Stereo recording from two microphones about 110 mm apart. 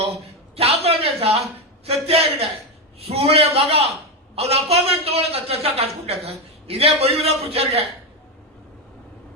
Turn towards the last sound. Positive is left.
turn(degrees=-65)  # may be behind; listen again after turning